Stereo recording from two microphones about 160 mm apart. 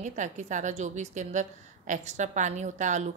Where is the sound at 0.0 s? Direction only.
50° right (ahead or behind).